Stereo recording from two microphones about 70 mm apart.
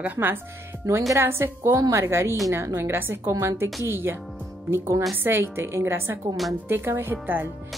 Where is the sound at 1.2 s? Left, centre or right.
Right.